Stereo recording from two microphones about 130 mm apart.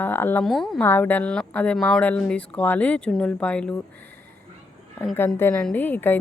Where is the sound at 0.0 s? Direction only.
15° left (ahead or behind).